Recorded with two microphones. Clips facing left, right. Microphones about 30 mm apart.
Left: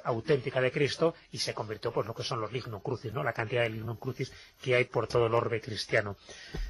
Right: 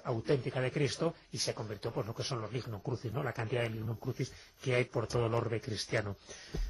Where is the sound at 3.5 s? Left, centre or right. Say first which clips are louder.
Left 5 dB; centre.